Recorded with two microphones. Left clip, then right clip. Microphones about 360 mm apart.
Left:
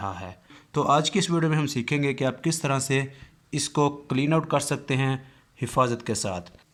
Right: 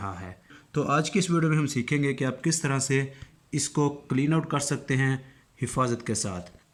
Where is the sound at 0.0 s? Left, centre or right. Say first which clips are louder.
Left 4 dB; centre.